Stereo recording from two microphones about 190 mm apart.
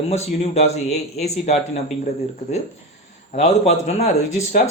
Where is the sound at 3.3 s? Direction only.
35° left (ahead or behind).